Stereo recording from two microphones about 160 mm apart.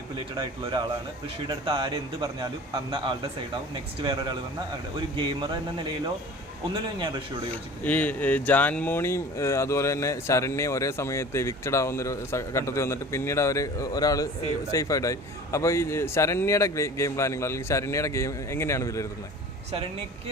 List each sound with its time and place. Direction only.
0.1 s a man's voice: 30° right (ahead or behind)
7.5 s speech: 10° left (ahead or behind)